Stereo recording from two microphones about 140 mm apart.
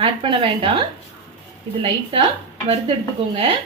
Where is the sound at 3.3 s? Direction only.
45° right (ahead or behind).